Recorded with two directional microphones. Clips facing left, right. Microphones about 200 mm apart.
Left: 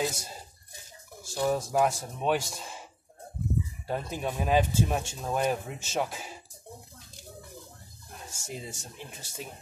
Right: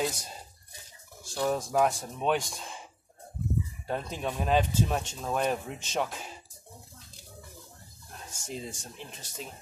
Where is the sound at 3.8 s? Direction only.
5° left (ahead or behind).